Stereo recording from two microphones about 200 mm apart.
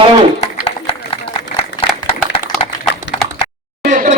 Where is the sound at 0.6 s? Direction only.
25° left (ahead or behind).